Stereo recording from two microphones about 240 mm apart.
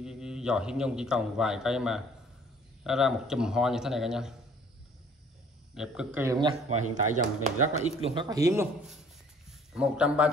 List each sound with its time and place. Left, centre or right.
0.0 s a man's voice: centre
5.8 s speech: centre
7.2 s a man's voice: right; by 8.6 s centre
9.5 s a man's voice: centre